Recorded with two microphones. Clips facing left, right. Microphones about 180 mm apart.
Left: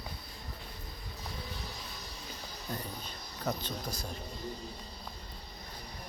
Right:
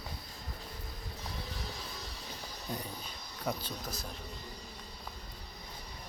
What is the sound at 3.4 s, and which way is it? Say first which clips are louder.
Speech: left 2 dB; 5° right (ahead or behind).